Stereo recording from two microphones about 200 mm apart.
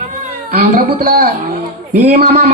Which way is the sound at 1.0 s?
50° right (ahead or behind).